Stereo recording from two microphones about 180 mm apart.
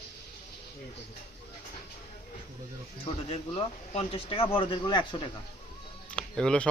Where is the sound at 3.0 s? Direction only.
35° left (ahead or behind).